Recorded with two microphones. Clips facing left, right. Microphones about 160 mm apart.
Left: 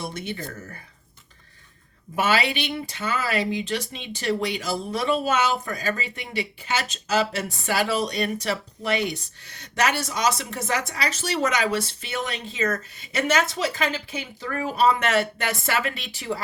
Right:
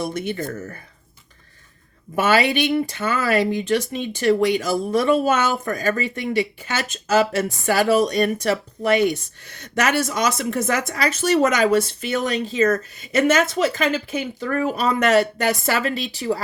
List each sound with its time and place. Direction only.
0.1 s speech: 50° right (ahead or behind)
2.1 s speech: 50° right (ahead or behind)